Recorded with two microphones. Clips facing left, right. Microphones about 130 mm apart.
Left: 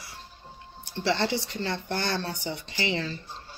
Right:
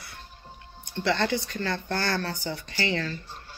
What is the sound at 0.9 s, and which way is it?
Speech, 25° left (ahead or behind).